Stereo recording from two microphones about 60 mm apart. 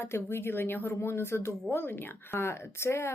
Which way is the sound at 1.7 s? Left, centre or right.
Left.